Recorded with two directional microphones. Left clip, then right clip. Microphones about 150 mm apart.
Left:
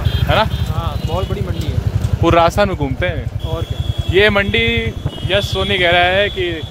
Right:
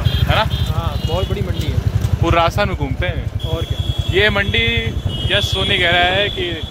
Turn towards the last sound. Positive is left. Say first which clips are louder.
# left 2 dB
turn(degrees=90)